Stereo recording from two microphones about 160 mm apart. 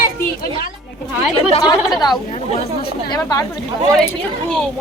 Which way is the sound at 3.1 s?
25° left (ahead or behind).